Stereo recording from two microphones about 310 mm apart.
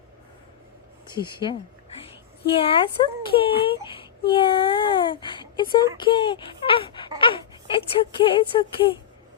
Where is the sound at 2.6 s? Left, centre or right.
Centre.